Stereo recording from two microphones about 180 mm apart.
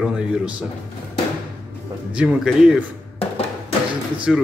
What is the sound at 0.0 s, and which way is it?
Speech, 5° right (ahead or behind).